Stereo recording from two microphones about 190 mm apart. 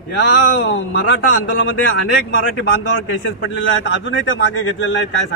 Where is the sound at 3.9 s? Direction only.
80° left.